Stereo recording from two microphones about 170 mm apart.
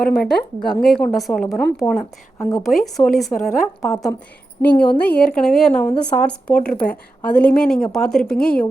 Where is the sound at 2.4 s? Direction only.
20° left (ahead or behind).